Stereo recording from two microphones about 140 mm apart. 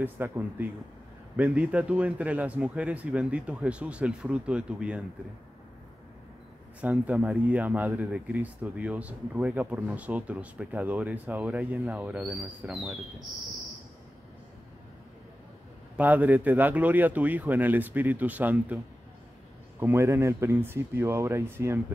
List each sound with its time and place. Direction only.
0.0 s a man's voice: 15° right (ahead or behind)
6.8 s a man's voice: 10° right (ahead or behind)
16.0 s a man's voice: 10° right (ahead or behind)
19.8 s a man's voice: 15° right (ahead or behind)